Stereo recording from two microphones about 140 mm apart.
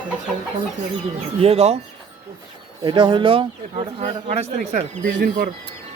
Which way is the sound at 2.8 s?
35° right (ahead or behind).